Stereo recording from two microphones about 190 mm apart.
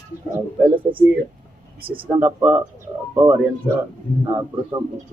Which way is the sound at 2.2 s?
5° right (ahead or behind).